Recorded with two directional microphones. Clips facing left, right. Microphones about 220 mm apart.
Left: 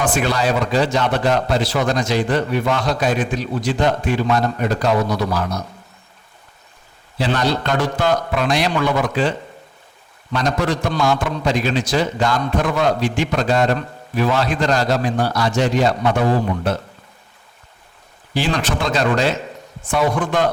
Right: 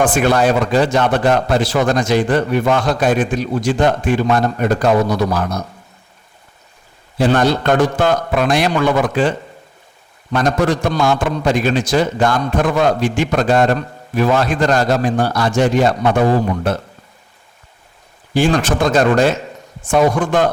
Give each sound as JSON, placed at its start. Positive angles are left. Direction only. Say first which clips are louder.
{"t": 0.0, "sound": "a man's voice", "louder": "right 5 dB", "side_deg": -50}
{"t": 7.2, "sound": "a man's voice", "louder": "right 5 dB", "side_deg": -50}
{"t": 10.3, "sound": "a man's voice", "louder": "right 4 dB", "side_deg": -50}
{"t": 18.3, "sound": "a man's voice", "louder": "right 6 dB", "side_deg": -45}